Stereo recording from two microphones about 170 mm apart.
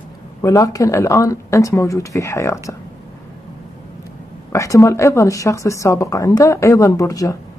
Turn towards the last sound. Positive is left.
turn(degrees=20)  # may be behind; listen again after turning